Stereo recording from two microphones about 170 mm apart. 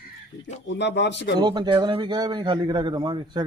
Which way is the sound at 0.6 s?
90° left.